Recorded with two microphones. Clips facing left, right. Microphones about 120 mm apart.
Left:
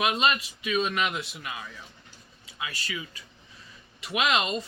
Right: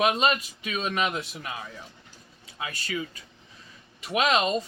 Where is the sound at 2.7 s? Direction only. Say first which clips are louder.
Right 6 dB; 45° right (ahead or behind).